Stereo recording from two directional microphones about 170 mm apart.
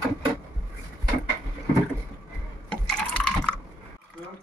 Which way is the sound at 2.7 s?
5° left (ahead or behind).